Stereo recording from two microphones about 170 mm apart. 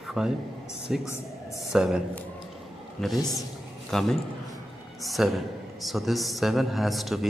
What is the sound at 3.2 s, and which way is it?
Speech, 20° left (ahead or behind).